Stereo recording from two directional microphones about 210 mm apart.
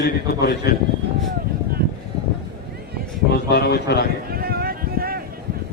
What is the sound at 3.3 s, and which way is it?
Speech, 50° left (ahead or behind).